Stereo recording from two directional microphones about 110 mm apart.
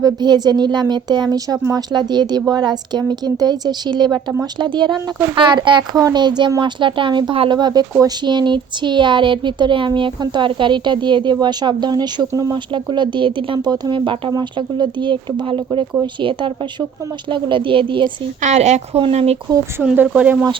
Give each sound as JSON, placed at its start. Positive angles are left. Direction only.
{"t": 0.0, "sound": "a woman's voice", "side_deg": -40}
{"t": 18.4, "sound": "a woman's voice", "side_deg": -90}
{"t": 19.1, "sound": "speech", "side_deg": -70}
{"t": 19.8, "sound": "speech", "side_deg": -15}